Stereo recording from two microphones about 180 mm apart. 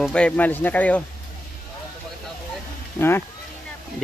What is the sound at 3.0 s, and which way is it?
Speech, 15° left (ahead or behind).